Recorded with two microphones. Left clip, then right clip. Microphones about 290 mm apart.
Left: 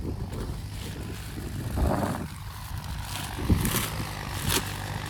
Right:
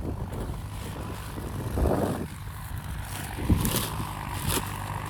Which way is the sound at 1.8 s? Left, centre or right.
Right.